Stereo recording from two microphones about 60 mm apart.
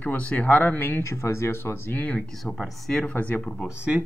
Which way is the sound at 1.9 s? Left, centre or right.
Left.